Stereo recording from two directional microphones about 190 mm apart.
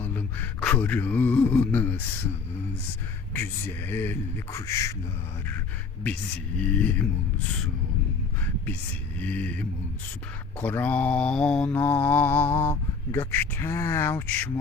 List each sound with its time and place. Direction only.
0.0 s a sound: 10° left (ahead or behind)
3.3 s mantra: 10° left (ahead or behind)
6.0 s mantra: 5° left (ahead or behind)
9.2 s mantra: 10° left (ahead or behind)